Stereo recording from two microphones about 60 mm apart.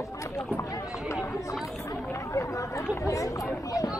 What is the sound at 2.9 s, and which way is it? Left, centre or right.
Speech, left.